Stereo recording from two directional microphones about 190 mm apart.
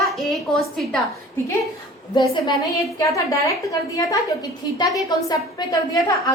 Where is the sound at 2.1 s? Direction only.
25° left (ahead or behind).